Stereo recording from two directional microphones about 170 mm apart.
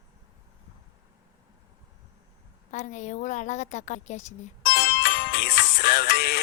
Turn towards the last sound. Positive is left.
turn(degrees=70)  # may be behind; listen again after turning